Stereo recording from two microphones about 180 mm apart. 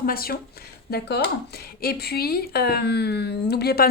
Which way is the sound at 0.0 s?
55° left (ahead or behind).